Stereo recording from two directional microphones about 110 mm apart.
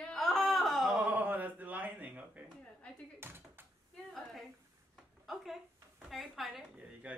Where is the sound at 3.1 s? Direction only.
20° right (ahead or behind).